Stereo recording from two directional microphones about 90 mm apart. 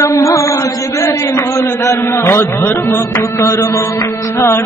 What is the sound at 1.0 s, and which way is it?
A man's voice, 35° left (ahead or behind).